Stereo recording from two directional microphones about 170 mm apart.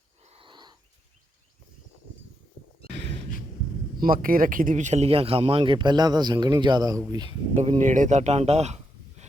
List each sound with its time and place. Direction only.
0.3 s a sound: 30° right (ahead or behind)
4.0 s speech: 55° right (ahead or behind); by 7.3 s 25° right (ahead or behind)
7.5 s speech: 40° right (ahead or behind)